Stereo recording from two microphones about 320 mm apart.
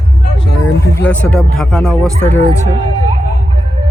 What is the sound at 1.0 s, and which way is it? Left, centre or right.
Speech, centre.